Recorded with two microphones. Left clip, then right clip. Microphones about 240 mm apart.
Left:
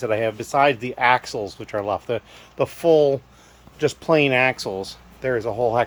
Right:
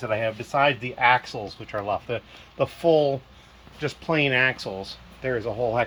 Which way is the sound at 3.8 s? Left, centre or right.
Left.